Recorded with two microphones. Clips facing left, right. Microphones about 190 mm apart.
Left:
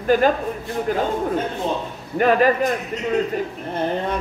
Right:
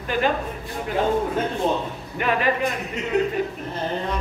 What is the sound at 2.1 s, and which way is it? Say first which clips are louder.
Speech: left 7 dB; 45° left (ahead or behind).